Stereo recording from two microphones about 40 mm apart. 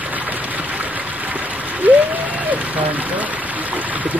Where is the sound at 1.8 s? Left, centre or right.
Right.